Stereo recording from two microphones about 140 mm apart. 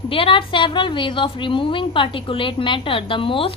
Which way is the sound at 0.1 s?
40° left (ahead or behind).